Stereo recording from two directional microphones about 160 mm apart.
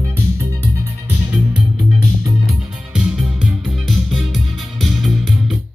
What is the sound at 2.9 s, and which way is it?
Music, 5° right (ahead or behind).